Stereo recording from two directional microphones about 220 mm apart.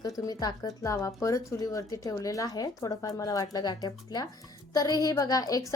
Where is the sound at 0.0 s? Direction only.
15° left (ahead or behind).